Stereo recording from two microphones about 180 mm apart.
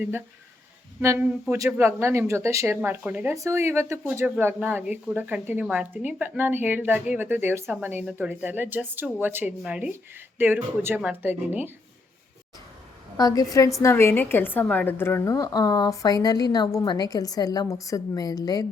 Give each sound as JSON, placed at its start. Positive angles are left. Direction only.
{"t": 1.0, "sound": "speech", "side_deg": -15}
{"t": 13.1, "sound": "a woman's voice", "side_deg": 20}